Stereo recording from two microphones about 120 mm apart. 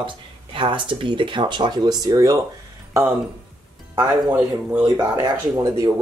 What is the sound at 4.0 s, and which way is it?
Speech, 35° right (ahead or behind).